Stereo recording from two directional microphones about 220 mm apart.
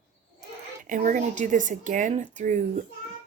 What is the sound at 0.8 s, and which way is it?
Speech, 35° right (ahead or behind).